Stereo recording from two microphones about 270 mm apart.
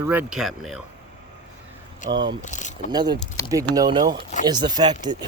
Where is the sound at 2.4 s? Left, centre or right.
Left.